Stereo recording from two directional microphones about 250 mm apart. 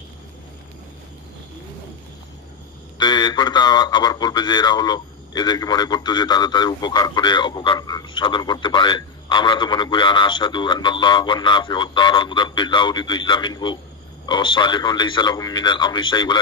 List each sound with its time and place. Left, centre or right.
3.0 s speech: centre